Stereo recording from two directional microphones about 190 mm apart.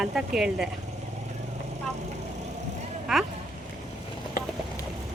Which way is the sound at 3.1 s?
Centre (ahead or behind).